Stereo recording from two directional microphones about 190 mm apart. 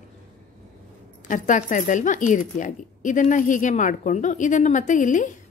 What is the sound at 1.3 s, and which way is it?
Speech, 40° left (ahead or behind).